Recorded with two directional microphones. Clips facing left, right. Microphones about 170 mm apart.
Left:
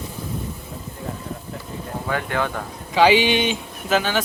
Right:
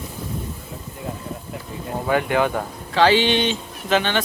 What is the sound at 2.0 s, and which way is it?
Speech, 15° right (ahead or behind).